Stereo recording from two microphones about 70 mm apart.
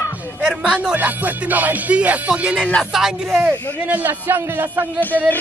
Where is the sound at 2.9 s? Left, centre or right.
Centre.